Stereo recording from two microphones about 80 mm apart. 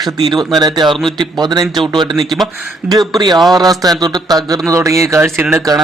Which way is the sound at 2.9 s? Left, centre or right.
Right.